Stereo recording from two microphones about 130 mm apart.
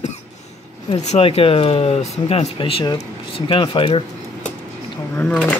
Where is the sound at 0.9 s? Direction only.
50° left (ahead or behind).